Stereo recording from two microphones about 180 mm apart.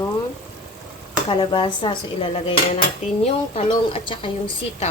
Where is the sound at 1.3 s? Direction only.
30° left (ahead or behind).